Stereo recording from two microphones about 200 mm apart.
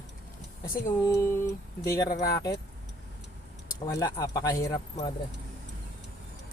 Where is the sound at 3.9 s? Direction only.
15° left (ahead or behind).